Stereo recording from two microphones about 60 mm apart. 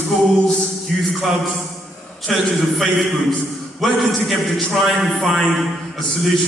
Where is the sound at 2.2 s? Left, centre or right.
Centre.